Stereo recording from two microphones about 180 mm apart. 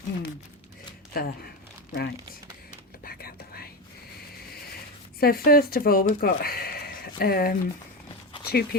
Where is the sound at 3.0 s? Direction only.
55° left (ahead or behind).